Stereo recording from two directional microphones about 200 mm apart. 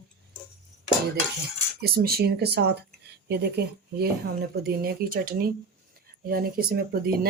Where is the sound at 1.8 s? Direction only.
50° right (ahead or behind).